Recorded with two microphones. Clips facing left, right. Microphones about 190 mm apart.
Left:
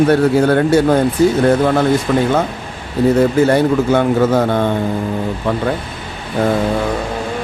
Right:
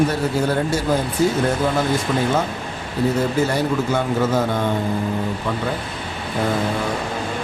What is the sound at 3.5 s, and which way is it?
Speech, 65° left (ahead or behind).